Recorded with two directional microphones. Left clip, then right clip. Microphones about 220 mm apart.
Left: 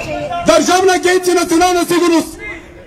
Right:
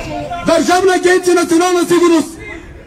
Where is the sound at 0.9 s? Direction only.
25° left (ahead or behind).